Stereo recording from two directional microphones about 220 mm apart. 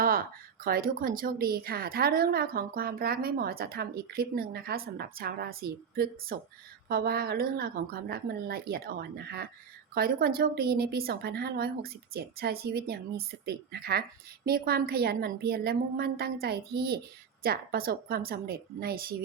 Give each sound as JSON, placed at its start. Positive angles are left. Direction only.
{"t": 0.0, "sound": "a woman's voice", "side_deg": -40}